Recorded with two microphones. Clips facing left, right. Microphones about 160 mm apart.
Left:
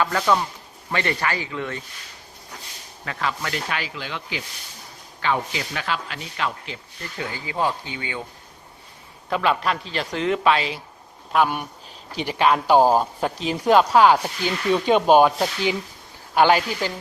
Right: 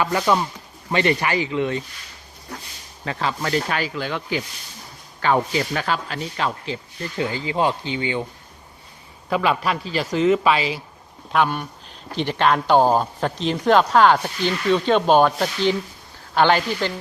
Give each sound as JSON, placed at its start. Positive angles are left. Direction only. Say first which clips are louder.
{"t": 0.0, "sound": "speech", "louder": "right 1 dB", "side_deg": -15}
{"t": 3.0, "sound": "speech", "louder": "right 3 dB", "side_deg": -30}
{"t": 9.3, "sound": "speech", "louder": "right 1 dB", "side_deg": -5}
{"t": 11.3, "sound": "speech", "louder": "even", "side_deg": 10}